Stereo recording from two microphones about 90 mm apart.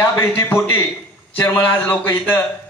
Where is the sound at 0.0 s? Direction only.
25° left (ahead or behind).